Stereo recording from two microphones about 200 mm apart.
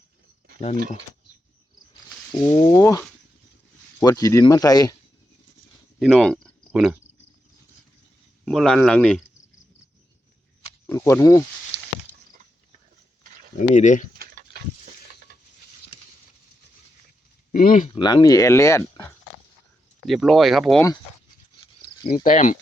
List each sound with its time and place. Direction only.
2.3 s speech: 20° left (ahead or behind)
4.0 s speech: 15° left (ahead or behind)
6.0 s speech: centre (ahead or behind)
8.4 s speech: 5° left (ahead or behind)
10.8 s speech: 15° left (ahead or behind)
13.6 s speech: 40° left (ahead or behind)
14.2 s a sound: 50° right (ahead or behind)
17.5 s speech: 45° left (ahead or behind)
18.0 s speech: 20° left (ahead or behind)
20.1 s speech: centre (ahead or behind)
21.6 s a sound: 25° left (ahead or behind)
22.2 s speech: 40° left (ahead or behind)